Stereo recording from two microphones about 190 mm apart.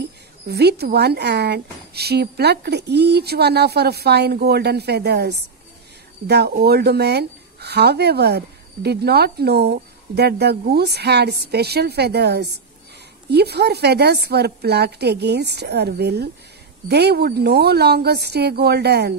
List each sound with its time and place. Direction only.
0.5 s speech: 60° right (ahead or behind)